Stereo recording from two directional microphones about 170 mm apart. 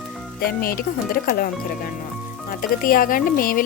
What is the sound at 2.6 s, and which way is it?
Speech, 55° left (ahead or behind).